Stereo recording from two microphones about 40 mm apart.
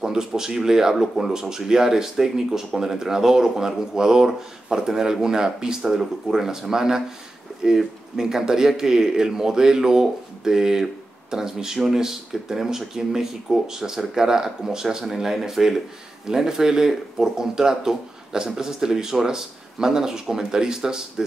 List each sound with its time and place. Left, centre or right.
0.0 s speech: centre